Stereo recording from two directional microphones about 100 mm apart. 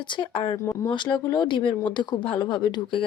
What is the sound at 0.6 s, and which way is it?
Speech, 30° left (ahead or behind).